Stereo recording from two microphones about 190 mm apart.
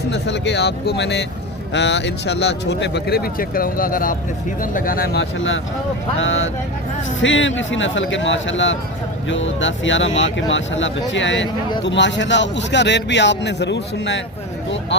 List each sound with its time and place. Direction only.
0.1 s a man's voice: 65° left (ahead or behind)